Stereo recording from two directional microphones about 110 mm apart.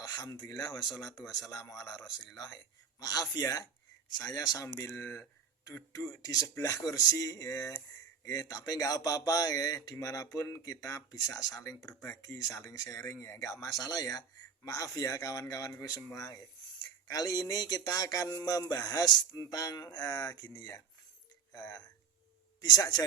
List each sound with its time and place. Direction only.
0.0 s a man's voice: 40° left (ahead or behind)
4.9 s a man's voice: 20° left (ahead or behind); by 23.0 s 35° left (ahead or behind)